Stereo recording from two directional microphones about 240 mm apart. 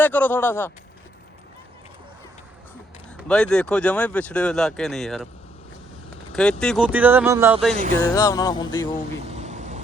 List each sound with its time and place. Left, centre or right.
0.0 s music: centre
3.2 s speech: centre
6.3 s speech: centre
7.7 s speech: right
8.0 s music: centre
9.2 s vehicle: right